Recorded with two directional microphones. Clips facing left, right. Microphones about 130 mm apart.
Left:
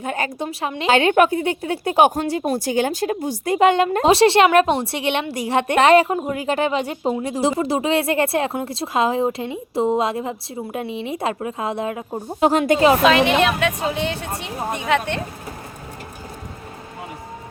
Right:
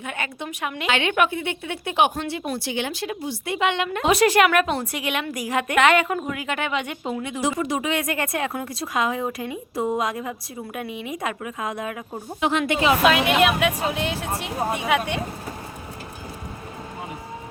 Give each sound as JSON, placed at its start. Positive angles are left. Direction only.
{"t": 0.0, "sound": "a woman's voice", "side_deg": 40}
{"t": 12.4, "sound": "a woman's voice", "side_deg": 40}
{"t": 13.0, "sound": "a woman's voice", "side_deg": -5}